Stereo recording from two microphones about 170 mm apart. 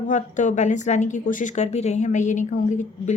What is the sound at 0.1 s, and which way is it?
A woman's voice, 45° left (ahead or behind).